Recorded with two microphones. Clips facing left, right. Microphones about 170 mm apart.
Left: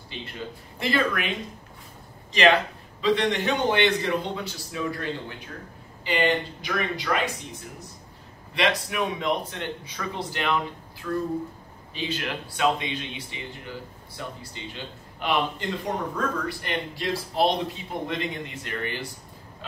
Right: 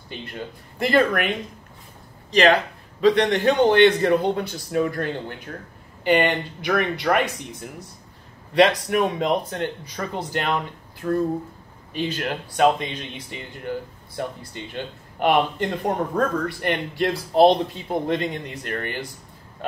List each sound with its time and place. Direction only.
0.7 s speech: 50° right (ahead or behind)
3.0 s speech: 45° right (ahead or behind)
8.5 s speech: 45° right (ahead or behind)